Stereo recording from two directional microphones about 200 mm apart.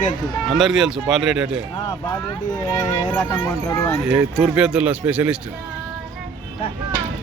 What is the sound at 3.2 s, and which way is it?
Speech, 15° left (ahead or behind).